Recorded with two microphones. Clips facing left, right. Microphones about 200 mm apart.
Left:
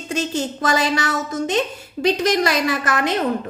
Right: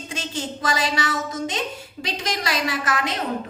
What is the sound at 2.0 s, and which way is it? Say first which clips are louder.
A woman's voice: left 10 dB; 50° left (ahead or behind).